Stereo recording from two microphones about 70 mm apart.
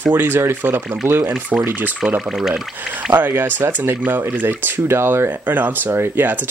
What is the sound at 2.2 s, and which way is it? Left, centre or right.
Speech, centre.